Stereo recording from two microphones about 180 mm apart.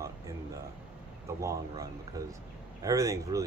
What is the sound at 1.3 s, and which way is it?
Speech, 15° right (ahead or behind).